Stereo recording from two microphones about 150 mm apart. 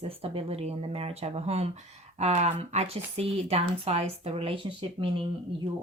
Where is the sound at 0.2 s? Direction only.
40° right (ahead or behind).